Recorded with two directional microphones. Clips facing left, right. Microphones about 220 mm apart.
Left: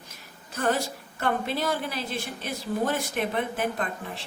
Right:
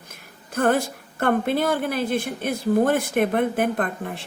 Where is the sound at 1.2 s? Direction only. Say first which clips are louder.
Right 6 dB; 55° right (ahead or behind).